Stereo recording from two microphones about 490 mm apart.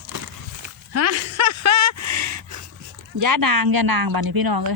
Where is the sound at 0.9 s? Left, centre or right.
Right.